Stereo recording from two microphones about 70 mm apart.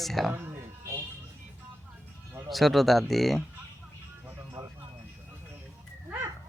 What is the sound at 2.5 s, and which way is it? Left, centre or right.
Speech, centre.